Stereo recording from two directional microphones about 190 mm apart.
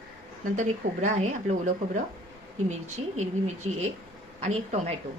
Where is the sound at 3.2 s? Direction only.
35° right (ahead or behind).